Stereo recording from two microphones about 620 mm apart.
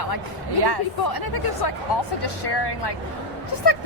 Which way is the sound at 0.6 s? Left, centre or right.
Right.